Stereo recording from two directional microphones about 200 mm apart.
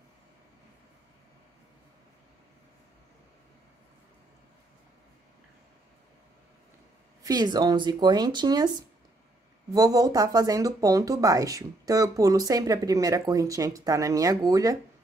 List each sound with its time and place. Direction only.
7.2 s speech: 20° right (ahead or behind)